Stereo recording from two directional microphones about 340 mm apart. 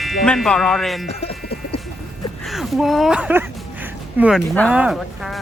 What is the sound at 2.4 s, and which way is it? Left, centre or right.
Speech, centre.